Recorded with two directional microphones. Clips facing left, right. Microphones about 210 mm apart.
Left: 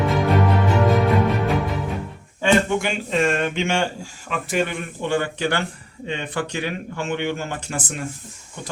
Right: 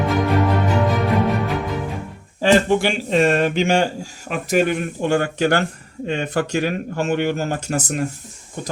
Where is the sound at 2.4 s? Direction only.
35° right (ahead or behind).